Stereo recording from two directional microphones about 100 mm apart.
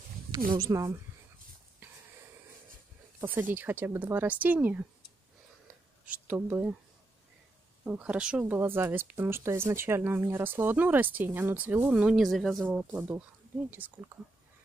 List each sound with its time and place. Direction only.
0.7 s a woman's voice: 35° right (ahead or behind)
1.8 s wheeze: 20° right (ahead or behind)
3.2 s speech: 20° right (ahead or behind)
6.0 s speech: 15° right (ahead or behind)
7.8 s speech: 10° right (ahead or behind)
13.7 s speech: 20° right (ahead or behind)